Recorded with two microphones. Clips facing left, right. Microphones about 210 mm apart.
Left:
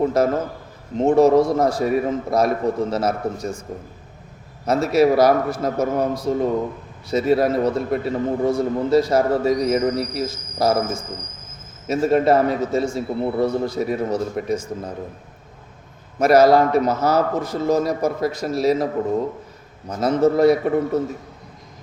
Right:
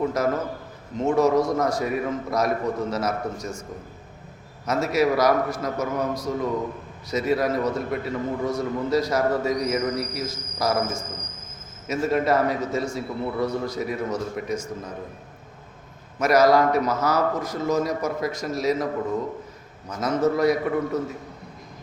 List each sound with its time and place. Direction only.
0.0 s a man's voice: 30° left (ahead or behind)
4.6 s a man's voice: 30° left (ahead or behind)
16.2 s a man's voice: 30° left (ahead or behind)
19.9 s a man's voice: 30° left (ahead or behind)